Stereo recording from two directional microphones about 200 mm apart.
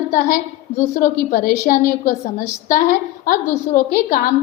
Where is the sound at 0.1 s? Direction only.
40° left (ahead or behind).